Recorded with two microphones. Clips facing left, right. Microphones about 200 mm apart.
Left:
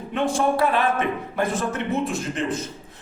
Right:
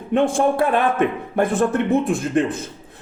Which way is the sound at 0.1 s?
55° right (ahead or behind).